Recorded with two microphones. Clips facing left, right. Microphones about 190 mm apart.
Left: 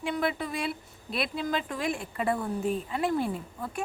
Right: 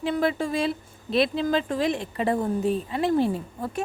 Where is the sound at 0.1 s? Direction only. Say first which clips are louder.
Right 5 dB; 30° right (ahead or behind).